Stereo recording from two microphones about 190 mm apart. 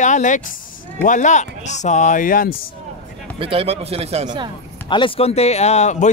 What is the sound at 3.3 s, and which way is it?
Speech, 30° right (ahead or behind).